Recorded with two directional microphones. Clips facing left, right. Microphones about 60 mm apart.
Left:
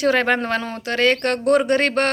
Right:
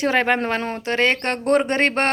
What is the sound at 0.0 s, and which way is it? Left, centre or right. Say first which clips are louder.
A woman's voice: left 1 dB; right.